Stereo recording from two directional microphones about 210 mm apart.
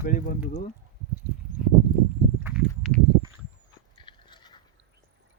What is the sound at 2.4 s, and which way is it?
Walk, 5° right (ahead or behind).